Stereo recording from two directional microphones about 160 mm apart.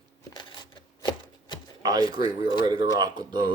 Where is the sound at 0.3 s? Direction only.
30° left (ahead or behind).